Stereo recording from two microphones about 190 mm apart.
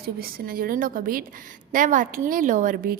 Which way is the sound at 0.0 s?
50° right (ahead or behind).